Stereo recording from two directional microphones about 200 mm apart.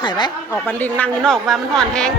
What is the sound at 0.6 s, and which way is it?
A man's voice, 10° left (ahead or behind).